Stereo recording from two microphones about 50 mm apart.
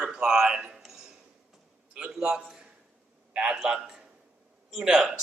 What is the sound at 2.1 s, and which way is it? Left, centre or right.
A man's voice, centre.